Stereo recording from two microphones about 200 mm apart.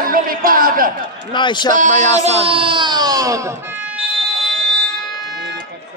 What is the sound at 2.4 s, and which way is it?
Speech, 25° right (ahead or behind).